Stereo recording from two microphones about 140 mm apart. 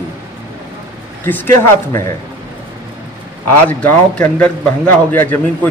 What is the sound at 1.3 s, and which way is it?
Speech, 15° left (ahead or behind).